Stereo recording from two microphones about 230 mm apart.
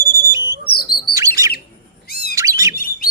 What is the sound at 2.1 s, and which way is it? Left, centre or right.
Bird, left.